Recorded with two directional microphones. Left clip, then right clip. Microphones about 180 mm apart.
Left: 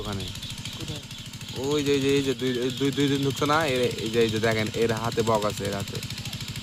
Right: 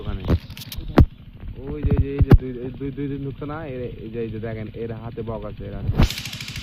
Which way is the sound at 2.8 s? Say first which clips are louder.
Left 6 dB; 20° left (ahead or behind).